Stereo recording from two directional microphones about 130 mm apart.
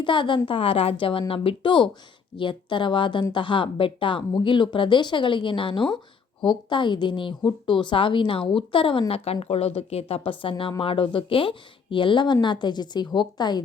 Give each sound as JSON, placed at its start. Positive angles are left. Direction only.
{"t": 0.0, "sound": "a woman's voice", "side_deg": 40}